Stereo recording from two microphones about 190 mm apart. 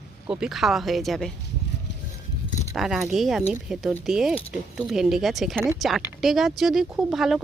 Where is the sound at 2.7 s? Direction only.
Centre (ahead or behind).